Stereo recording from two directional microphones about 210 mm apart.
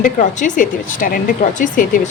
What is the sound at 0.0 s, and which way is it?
A woman's voice, 35° left (ahead or behind).